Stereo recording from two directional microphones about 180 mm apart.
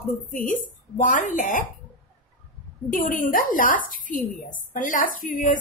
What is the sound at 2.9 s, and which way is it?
Speech, 45° left (ahead or behind).